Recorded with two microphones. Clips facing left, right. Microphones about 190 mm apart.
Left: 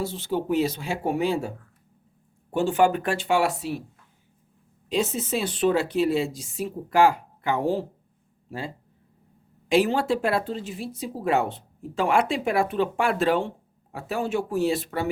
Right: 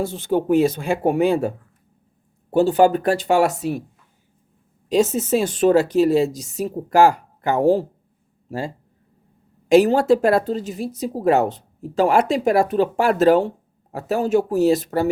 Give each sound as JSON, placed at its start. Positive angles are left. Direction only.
{"t": 0.0, "sound": "a woman's voice", "side_deg": -50}
{"t": 2.5, "sound": "speech", "side_deg": -35}
{"t": 4.9, "sound": "a woman's voice", "side_deg": -45}